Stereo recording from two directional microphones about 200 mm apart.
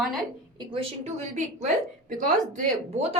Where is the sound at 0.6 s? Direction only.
25° right (ahead or behind).